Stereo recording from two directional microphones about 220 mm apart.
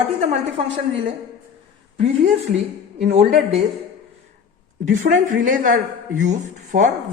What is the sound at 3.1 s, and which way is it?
Speech, 30° right (ahead or behind).